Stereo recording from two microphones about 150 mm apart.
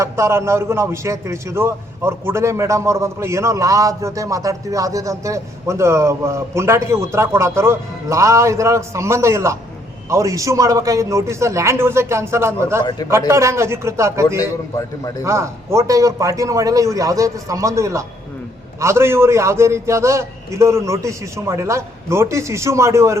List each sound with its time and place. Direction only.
0.0 s a man's voice: 20° right (ahead or behind)
12.8 s speech: 25° left (ahead or behind)
13.1 s a man's voice: 20° right (ahead or behind)